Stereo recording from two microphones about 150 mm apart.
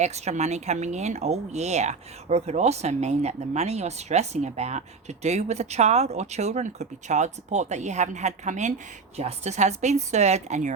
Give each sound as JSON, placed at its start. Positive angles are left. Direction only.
{"t": 0.0, "sound": "speech", "side_deg": -50}